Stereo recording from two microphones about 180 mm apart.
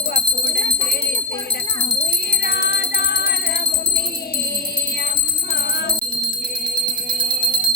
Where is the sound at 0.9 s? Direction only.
55° left (ahead or behind).